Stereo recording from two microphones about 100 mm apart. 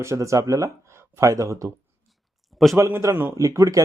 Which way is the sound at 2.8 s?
30° right (ahead or behind).